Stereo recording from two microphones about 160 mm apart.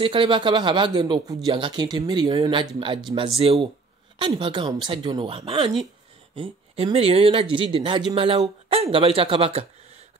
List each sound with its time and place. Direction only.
0.0 s speech: 30° right (ahead or behind)